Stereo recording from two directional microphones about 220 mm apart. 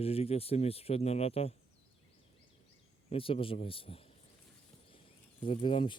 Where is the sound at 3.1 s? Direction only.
25° left (ahead or behind).